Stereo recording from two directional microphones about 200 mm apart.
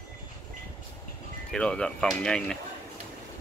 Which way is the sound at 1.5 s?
5° left (ahead or behind).